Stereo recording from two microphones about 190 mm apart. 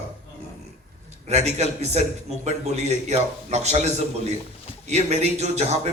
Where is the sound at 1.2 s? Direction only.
35° right (ahead or behind).